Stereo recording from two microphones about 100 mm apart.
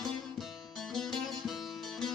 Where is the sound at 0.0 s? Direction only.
Centre (ahead or behind).